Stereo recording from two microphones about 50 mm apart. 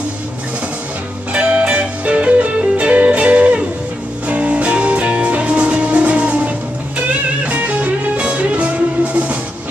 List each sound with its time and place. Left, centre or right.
1.3 s music: right